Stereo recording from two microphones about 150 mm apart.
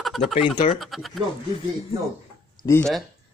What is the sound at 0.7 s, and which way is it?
Speech, centre (ahead or behind).